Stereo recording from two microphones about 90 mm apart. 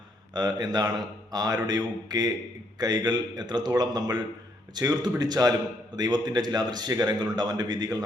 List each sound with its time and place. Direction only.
0.3 s a man's voice: 50° right (ahead or behind)